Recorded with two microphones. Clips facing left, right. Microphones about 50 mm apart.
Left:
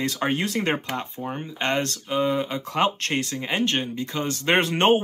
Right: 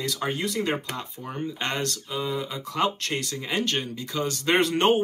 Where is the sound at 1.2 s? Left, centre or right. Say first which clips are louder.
Left 2 dB; left.